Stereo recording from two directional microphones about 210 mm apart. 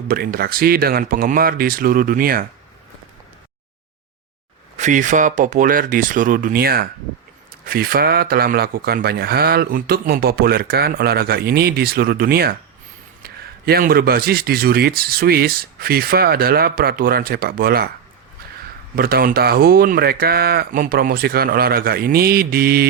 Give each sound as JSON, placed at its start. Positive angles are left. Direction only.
{"t": 0.1, "sound": "speech", "side_deg": -45}
{"t": 4.8, "sound": "speech", "side_deg": -35}
{"t": 18.9, "sound": "speech", "side_deg": -45}